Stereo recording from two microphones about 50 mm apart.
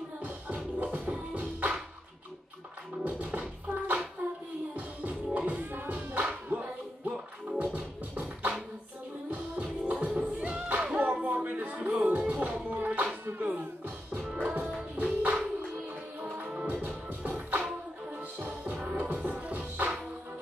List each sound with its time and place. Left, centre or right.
0.7 s music: right
3.0 s music: right
3.3 s a sound: right
4.2 s music: right
16.8 s music: right